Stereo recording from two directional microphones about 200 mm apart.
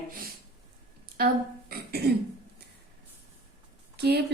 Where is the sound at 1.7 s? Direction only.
50° right (ahead or behind).